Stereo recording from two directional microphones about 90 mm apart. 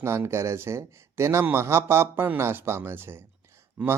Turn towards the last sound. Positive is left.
turn(degrees=-20)  # may be behind; listen again after turning